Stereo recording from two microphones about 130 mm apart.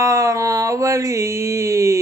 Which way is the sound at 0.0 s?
25° right (ahead or behind).